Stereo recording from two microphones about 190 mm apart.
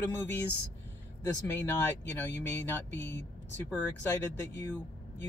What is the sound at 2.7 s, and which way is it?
Speech, 10° left (ahead or behind).